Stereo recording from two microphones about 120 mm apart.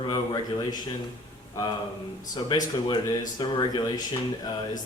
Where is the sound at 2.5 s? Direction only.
35° left (ahead or behind).